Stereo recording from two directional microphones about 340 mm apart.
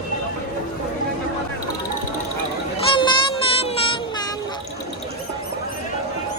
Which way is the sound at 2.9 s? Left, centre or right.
Centre.